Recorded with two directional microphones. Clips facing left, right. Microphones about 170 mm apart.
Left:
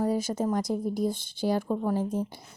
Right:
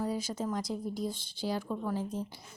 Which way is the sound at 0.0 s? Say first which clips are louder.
Left 7 dB; 50° left (ahead or behind).